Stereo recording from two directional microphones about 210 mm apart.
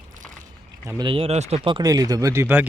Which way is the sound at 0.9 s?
20° right (ahead or behind).